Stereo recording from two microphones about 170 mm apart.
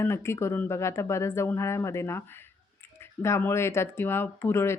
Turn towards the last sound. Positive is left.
turn(degrees=15)  # may be behind; listen again after turning